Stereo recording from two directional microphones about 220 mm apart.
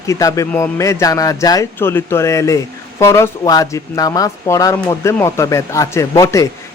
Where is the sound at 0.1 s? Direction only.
15° left (ahead or behind).